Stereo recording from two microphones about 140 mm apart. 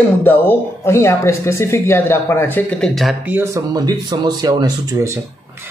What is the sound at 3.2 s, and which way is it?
Speech, 15° right (ahead or behind).